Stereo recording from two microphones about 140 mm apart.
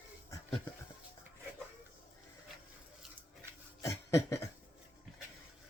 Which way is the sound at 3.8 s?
20° left (ahead or behind).